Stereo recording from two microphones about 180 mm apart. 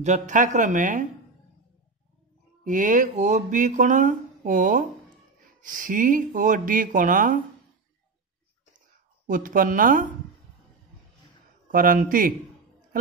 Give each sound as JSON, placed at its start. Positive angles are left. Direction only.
{"t": 0.0, "sound": "speech", "side_deg": -40}
{"t": 2.6, "sound": "speech", "side_deg": -45}
{"t": 9.3, "sound": "speech", "side_deg": -50}
{"t": 11.7, "sound": "speech", "side_deg": -50}